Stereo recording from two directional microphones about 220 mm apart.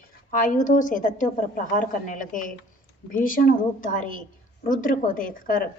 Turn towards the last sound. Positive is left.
turn(degrees=40)  # may be behind; listen again after turning